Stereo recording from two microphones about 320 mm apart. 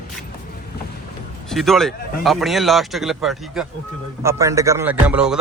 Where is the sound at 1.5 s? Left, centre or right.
Centre.